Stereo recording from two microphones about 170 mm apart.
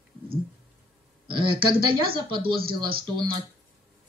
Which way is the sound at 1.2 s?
30° right (ahead or behind).